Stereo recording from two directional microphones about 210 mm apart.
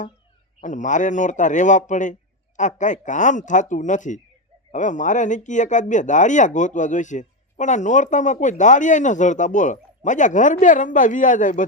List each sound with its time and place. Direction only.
0.6 s speech: 35° left (ahead or behind)